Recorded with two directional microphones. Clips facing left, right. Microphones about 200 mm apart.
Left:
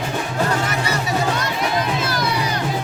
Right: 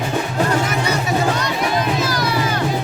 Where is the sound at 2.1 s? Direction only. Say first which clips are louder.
Right 2 dB; 20° left (ahead or behind).